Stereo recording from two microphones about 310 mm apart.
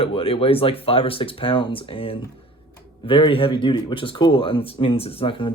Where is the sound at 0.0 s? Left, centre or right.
Centre.